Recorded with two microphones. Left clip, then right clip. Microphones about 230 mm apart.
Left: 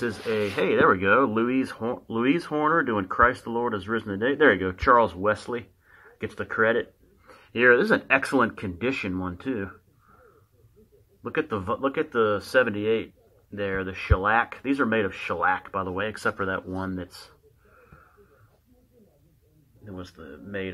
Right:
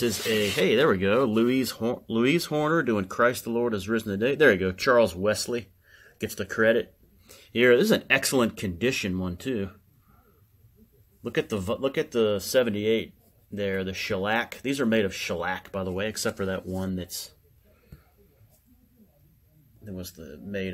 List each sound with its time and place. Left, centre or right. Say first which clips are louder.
0.6 s speech: left 3 dB; right
11.2 s speech: left 1 dB; right
20.2 s speech: even; right